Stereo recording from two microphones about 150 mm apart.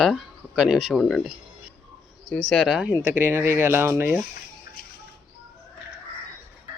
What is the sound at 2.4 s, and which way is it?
Speech, centre (ahead or behind).